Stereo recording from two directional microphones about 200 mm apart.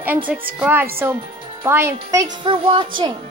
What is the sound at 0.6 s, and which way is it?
A child's voice, 10° right (ahead or behind).